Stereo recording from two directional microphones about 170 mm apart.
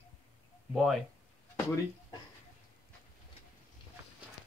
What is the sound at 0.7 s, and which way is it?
Speech, centre (ahead or behind).